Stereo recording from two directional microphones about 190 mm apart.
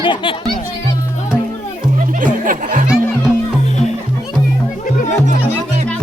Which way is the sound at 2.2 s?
45° right (ahead or behind).